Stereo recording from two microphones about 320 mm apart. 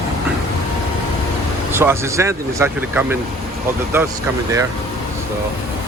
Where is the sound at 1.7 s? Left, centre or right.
Centre.